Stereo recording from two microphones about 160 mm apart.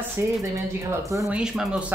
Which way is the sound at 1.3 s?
5° right (ahead or behind).